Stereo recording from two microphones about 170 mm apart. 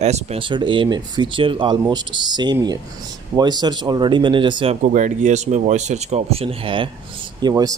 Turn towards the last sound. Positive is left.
turn(degrees=-25)  # may be behind; listen again after turning